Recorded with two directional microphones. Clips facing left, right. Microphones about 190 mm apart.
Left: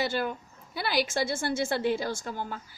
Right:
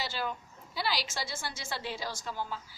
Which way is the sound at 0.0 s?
55° left (ahead or behind).